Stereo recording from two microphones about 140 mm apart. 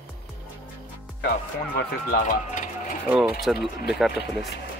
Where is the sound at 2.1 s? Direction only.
65° left (ahead or behind).